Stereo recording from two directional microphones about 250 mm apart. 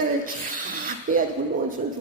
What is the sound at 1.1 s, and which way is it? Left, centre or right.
Speech, right.